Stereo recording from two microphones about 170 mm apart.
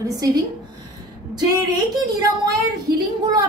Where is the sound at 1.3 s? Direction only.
20° right (ahead or behind).